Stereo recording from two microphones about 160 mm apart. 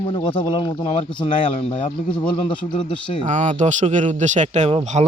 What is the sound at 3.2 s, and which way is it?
Speech, 45° right (ahead or behind).